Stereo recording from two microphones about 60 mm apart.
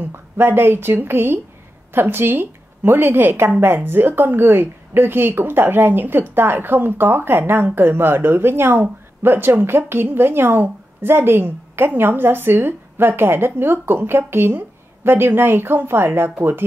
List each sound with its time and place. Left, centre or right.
0.1 s speech: right